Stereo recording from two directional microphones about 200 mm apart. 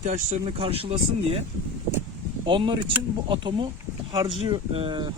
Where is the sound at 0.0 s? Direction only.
35° right (ahead or behind).